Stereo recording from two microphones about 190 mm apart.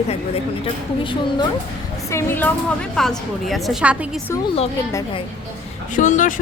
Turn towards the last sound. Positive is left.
turn(degrees=40)  # may be behind; listen again after turning